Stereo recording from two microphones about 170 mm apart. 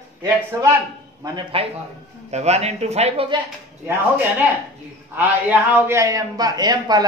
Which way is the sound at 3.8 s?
10° right (ahead or behind).